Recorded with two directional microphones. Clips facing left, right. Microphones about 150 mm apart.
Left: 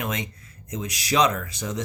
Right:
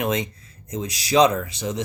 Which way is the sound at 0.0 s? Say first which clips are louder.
Right 6 dB; 25° right (ahead or behind).